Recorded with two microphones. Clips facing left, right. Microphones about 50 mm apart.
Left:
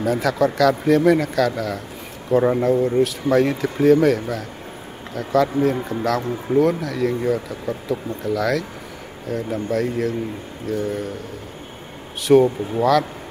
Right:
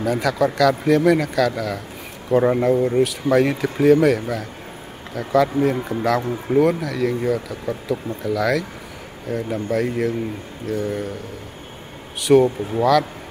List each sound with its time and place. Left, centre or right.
0.0 s speech: centre
2.3 s speech: centre
6.0 s speech: centre
9.3 s speech: centre
10.7 s speech: centre
12.3 s speech: centre